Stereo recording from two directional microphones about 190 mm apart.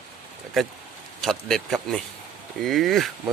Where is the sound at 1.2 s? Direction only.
Centre (ahead or behind).